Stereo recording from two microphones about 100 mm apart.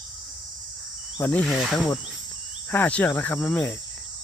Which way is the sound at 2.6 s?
15° left (ahead or behind).